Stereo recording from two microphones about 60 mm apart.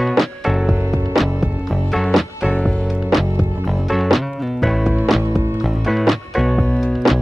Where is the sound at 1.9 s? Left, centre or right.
Centre.